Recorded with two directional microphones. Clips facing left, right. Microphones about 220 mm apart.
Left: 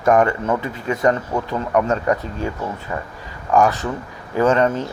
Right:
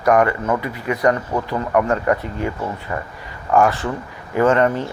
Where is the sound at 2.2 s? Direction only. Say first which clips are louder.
Right 1 dB; 15° right (ahead or behind).